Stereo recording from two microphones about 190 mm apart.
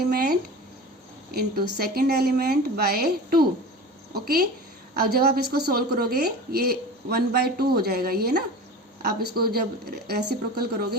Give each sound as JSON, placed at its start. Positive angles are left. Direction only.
{"t": 0.0, "sound": "a woman's voice", "side_deg": -55}